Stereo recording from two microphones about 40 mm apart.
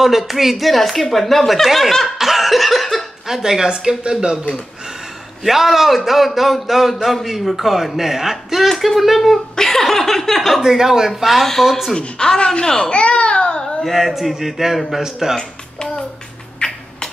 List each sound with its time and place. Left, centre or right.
0.0 s speech: centre
2.1 s laughter: centre
3.3 s speech: centre
5.4 s speech: centre
10.6 s speech: centre
11.3 s speech: centre
12.0 s speech: left
12.9 s baby cry: left
13.8 s speech: centre
15.3 s music: centre
16.5 s a sound: centre